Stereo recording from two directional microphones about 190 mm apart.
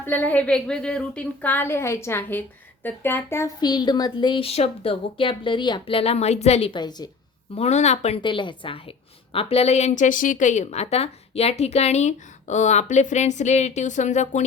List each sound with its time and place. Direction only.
0.0 s a woman's voice: 10° left (ahead or behind)
7.5 s a woman's voice: 35° left (ahead or behind)